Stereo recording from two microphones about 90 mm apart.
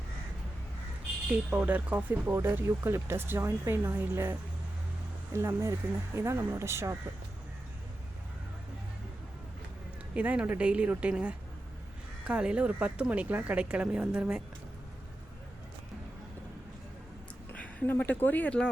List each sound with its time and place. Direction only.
1.5 s speech: 20° right (ahead or behind)
10.2 s a woman's voice: 15° right (ahead or behind)
17.5 s speech: 15° left (ahead or behind)